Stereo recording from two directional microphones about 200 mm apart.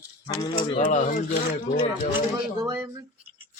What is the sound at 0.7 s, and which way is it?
Speech, 40° left (ahead or behind).